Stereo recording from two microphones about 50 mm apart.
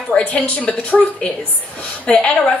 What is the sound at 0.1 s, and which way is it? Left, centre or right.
A woman's voice, left.